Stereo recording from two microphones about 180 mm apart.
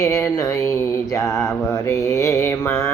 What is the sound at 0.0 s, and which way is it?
Mantra, 20° left (ahead or behind).